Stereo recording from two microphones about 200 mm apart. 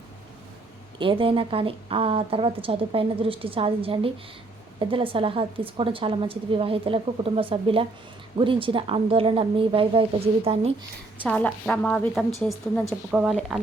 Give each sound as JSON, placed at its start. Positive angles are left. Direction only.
{"t": 0.9, "sound": "a woman's voice", "side_deg": -25}
{"t": 11.3, "sound": "a woman's voice", "side_deg": 5}